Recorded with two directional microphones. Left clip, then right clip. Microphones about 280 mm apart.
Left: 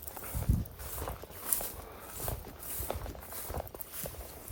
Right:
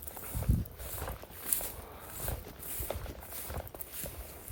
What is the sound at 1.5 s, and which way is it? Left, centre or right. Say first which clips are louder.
Walk: left 1 dB; centre.